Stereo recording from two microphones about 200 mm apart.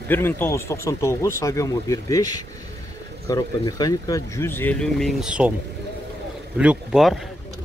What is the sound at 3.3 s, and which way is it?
Speech, 20° left (ahead or behind).